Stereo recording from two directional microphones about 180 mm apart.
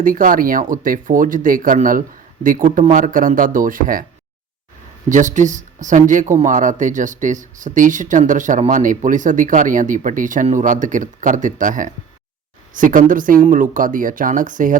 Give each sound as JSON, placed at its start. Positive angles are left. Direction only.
{"t": 0.0, "sound": "speech", "side_deg": -50}
{"t": 5.0, "sound": "speech", "side_deg": -45}